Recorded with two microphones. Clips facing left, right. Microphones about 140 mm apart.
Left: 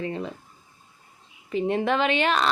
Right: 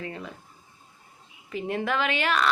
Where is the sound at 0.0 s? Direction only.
25° left (ahead or behind).